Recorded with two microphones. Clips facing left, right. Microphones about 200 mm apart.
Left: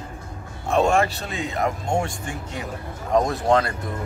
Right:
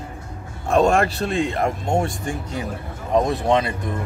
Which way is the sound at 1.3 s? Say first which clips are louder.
Right 4 dB; 30° right (ahead or behind).